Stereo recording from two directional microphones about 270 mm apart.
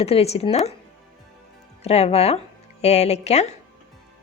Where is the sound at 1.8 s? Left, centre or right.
Left.